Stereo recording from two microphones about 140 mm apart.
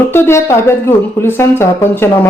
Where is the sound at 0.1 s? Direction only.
20° left (ahead or behind).